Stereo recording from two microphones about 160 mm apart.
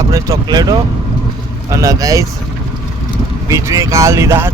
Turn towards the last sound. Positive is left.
turn(degrees=-15)  # may be behind; listen again after turning